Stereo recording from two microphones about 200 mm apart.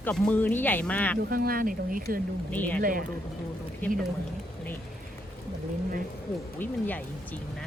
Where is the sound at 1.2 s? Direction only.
45° right (ahead or behind).